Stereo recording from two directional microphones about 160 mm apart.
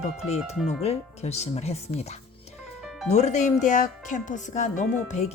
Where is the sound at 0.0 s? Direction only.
40° left (ahead or behind).